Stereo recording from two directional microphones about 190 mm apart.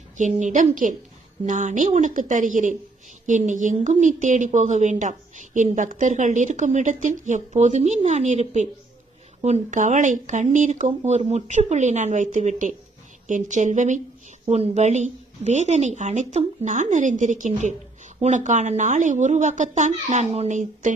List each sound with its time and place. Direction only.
0.2 s speech: 40° right (ahead or behind)